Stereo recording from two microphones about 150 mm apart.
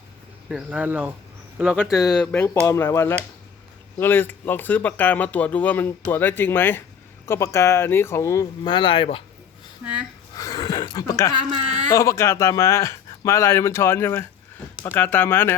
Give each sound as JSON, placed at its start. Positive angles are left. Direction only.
{"t": 0.4, "sound": "speech", "side_deg": -5}
{"t": 2.0, "sound": "speech", "side_deg": 5}
{"t": 8.7, "sound": "speech", "side_deg": 35}
{"t": 9.8, "sound": "speech", "side_deg": -10}
{"t": 10.3, "sound": "a sound", "side_deg": 25}
{"t": 11.9, "sound": "speech", "side_deg": 20}